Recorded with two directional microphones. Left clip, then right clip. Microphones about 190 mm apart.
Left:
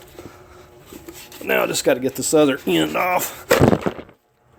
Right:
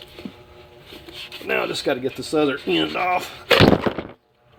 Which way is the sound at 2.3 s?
50° left (ahead or behind).